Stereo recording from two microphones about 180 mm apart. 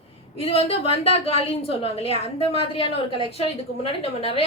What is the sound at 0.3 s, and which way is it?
A woman's voice, 30° left (ahead or behind).